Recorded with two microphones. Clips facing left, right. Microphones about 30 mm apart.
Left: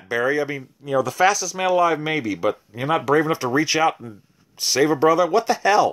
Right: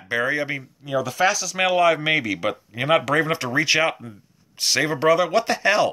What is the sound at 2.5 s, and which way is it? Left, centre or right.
Speech, right.